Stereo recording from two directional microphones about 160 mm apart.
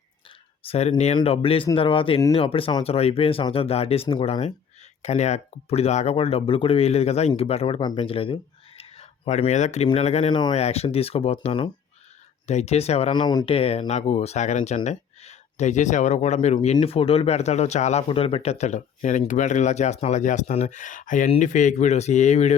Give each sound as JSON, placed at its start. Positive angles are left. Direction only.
{"t": 0.7, "sound": "speech", "side_deg": 45}
{"t": 10.3, "sound": "speech", "side_deg": 30}
{"t": 10.6, "sound": "speech", "side_deg": 40}
{"t": 13.1, "sound": "speech", "side_deg": 30}
{"t": 16.6, "sound": "speech", "side_deg": 35}